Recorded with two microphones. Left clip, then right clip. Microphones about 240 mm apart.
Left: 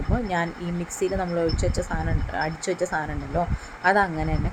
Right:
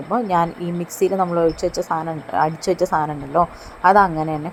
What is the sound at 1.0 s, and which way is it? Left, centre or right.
A woman's voice, centre.